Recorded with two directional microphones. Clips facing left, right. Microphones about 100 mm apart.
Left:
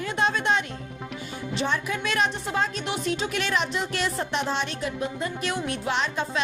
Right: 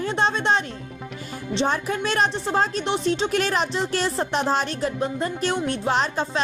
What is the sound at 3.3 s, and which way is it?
A woman's voice, 40° right (ahead or behind).